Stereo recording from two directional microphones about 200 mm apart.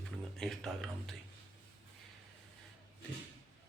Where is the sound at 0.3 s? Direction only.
Centre (ahead or behind).